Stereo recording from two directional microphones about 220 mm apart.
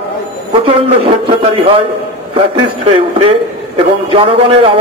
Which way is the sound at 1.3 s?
25° right (ahead or behind).